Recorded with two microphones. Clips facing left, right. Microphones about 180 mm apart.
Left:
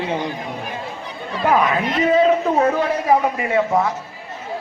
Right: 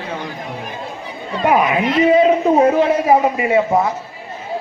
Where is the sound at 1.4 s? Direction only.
15° right (ahead or behind).